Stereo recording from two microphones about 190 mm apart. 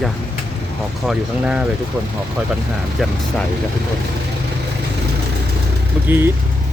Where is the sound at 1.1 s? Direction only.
5° right (ahead or behind).